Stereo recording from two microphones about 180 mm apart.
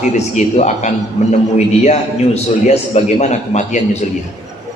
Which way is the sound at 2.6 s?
40° left (ahead or behind).